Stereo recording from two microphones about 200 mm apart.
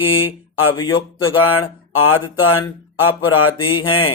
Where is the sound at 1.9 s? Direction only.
90° left.